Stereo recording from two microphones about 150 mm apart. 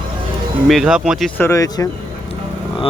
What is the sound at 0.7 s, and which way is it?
Speech, centre (ahead or behind).